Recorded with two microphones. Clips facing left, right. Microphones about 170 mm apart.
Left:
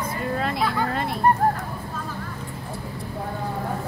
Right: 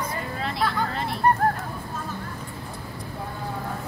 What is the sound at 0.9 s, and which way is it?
Fowl, 50° left (ahead or behind).